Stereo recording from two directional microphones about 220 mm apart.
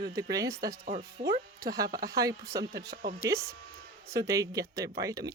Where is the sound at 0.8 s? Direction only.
35° right (ahead or behind).